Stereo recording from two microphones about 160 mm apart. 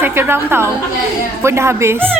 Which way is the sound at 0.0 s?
15° right (ahead or behind).